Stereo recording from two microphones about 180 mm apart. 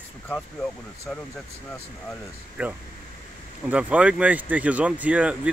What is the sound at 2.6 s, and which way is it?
Speech, 5° right (ahead or behind).